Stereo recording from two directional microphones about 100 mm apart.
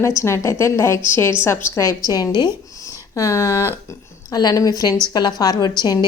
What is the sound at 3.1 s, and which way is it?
Speech, 30° left (ahead or behind).